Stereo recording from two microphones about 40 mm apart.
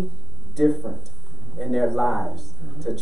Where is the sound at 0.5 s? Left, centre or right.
Centre.